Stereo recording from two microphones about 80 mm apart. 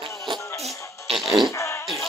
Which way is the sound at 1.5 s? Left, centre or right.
Left.